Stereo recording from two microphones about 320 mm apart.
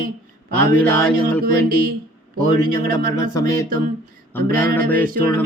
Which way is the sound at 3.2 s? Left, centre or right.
Centre.